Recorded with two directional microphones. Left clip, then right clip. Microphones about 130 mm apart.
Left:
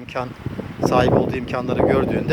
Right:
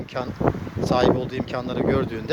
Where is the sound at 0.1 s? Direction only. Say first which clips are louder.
Right 3 dB; 15° left (ahead or behind).